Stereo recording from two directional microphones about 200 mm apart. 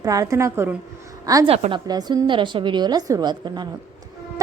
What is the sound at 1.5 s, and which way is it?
A woman's voice, 25° right (ahead or behind).